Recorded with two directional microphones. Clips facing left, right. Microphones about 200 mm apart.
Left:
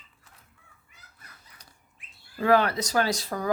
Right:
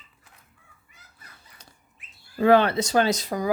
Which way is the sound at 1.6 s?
25° right (ahead or behind).